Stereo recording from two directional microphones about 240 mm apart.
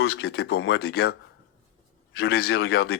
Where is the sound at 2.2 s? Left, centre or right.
Left.